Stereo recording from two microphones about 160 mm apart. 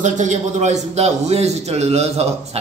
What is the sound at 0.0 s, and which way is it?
A man's voice, 50° right (ahead or behind).